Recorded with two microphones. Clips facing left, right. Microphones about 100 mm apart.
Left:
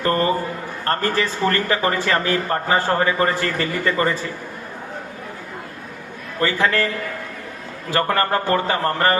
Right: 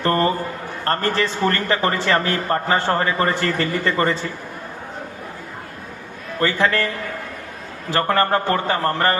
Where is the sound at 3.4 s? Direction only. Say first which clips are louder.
Right 1 dB; 20° left (ahead or behind).